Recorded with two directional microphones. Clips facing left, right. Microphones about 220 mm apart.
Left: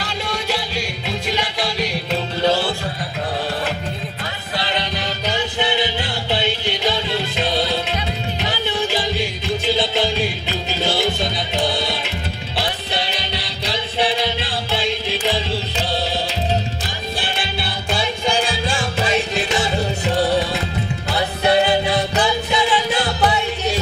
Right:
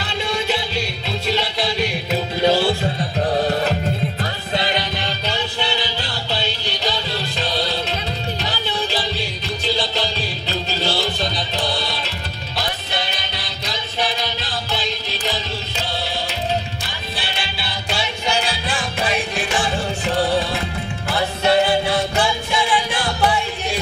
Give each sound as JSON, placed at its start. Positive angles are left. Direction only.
{"t": 0.7, "sound": "music", "side_deg": 15}
{"t": 1.9, "sound": "music", "side_deg": -5}
{"t": 4.6, "sound": "music", "side_deg": -15}
{"t": 5.3, "sound": "music", "side_deg": 20}
{"t": 18.5, "sound": "music", "side_deg": 25}
{"t": 21.5, "sound": "music", "side_deg": 20}